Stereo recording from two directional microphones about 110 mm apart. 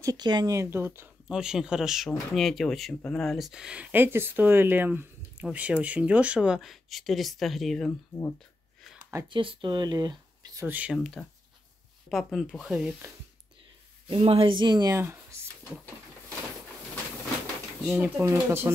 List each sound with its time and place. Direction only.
0.0 s speech: 35° right (ahead or behind)
0.6 s speech: 20° right (ahead or behind)
1.3 s speech: 5° right (ahead or behind)
9.3 s speech: 50° right (ahead or behind)
10.7 s speech: 10° right (ahead or behind)
14.0 s speech: 55° right (ahead or behind); by 15.0 s 40° right (ahead or behind)
17.8 s speech: 10° right (ahead or behind)
18.2 s speech: 25° right (ahead or behind)